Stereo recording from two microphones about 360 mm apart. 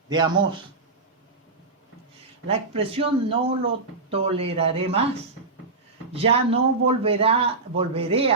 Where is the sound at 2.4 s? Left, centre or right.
Centre.